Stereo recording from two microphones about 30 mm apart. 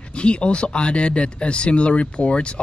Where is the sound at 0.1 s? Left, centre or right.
Left.